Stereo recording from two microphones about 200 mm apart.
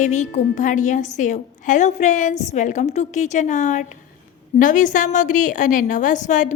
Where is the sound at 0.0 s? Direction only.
35° left (ahead or behind).